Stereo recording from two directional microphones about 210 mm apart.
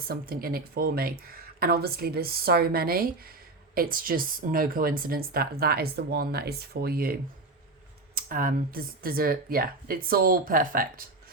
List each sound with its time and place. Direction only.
0.1 s speech: 45° right (ahead or behind)